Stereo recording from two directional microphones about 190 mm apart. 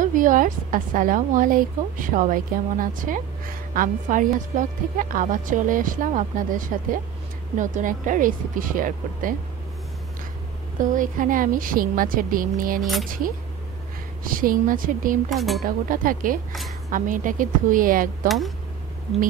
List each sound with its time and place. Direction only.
0.0 s a woman's voice: 45° right (ahead or behind)
10.8 s a woman's voice: 45° right (ahead or behind)
14.2 s a woman's voice: 45° right (ahead or behind)
15.2 s speech: centre (ahead or behind)
15.6 s a woman's voice: 45° right (ahead or behind)